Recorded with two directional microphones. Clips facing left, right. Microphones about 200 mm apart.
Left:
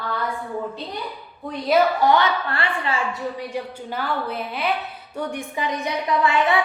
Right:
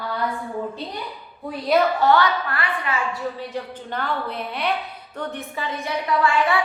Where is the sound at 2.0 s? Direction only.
15° left (ahead or behind).